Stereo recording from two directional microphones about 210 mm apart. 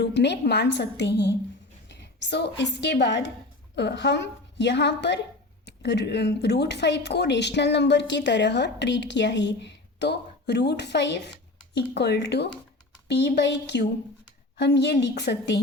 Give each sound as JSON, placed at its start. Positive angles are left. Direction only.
{"t": 0.0, "sound": "a woman's voice", "side_deg": 55}